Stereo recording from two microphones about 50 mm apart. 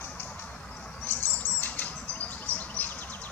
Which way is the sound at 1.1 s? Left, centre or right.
Left.